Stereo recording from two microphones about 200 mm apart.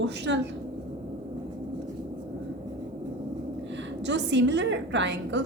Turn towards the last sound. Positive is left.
turn(degrees=-60)  # may be behind; listen again after turning